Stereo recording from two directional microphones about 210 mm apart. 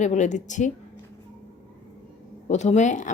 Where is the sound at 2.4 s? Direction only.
35° left (ahead or behind).